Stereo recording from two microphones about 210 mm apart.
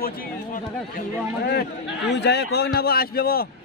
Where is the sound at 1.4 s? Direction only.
50° left (ahead or behind).